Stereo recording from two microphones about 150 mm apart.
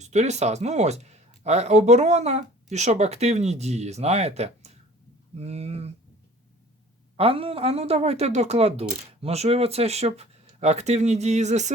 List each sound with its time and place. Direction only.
0.0 s speech: 50° right (ahead or behind)
7.2 s speech: 40° right (ahead or behind)